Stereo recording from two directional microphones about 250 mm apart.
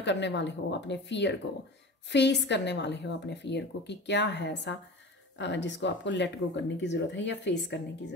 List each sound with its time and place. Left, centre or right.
0.0 s a woman's voice: left